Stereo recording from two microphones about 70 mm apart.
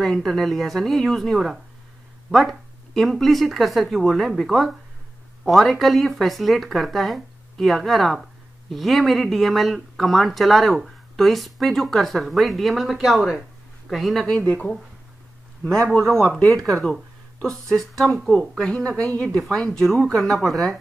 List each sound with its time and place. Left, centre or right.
0.0 s speech: centre
14.4 s speech: centre
16.0 s speech: centre
16.3 s speech: centre
18.9 s speech: centre